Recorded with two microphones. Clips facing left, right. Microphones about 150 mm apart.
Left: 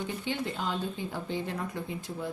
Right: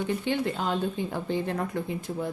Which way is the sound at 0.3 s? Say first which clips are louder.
Right 3 dB; 55° right (ahead or behind).